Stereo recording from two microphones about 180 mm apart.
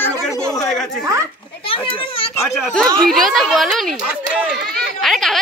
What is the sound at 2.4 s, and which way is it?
A woman's voice, centre (ahead or behind).